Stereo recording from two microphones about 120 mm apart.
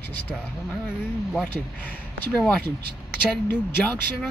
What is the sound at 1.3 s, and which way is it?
Speech, 10° left (ahead or behind).